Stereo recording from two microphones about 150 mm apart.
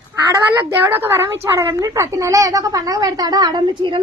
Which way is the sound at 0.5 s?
15° right (ahead or behind).